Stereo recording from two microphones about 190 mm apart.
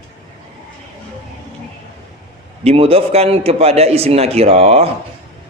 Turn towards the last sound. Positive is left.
turn(degrees=-30)  # may be behind; listen again after turning